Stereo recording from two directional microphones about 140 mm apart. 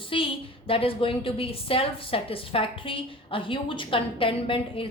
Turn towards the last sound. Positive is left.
turn(degrees=40)  # may be behind; listen again after turning